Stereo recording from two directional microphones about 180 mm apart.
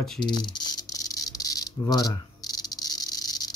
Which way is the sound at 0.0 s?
Centre (ahead or behind).